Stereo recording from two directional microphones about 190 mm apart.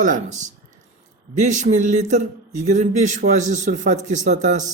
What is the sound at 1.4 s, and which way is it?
Speech, 40° right (ahead or behind).